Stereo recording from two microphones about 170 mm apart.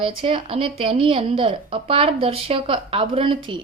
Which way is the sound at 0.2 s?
30° right (ahead or behind).